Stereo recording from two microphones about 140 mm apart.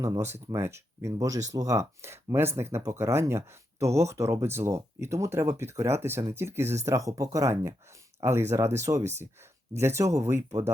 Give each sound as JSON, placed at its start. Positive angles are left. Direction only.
{"t": 0.0, "sound": "speech", "side_deg": -20}